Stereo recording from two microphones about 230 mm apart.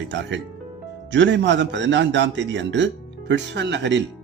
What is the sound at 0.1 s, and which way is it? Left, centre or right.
Speech, right.